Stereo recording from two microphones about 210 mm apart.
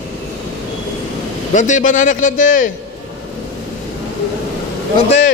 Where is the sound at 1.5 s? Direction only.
35° left (ahead or behind).